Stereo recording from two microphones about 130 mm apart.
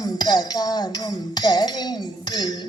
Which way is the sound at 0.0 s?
30° left (ahead or behind).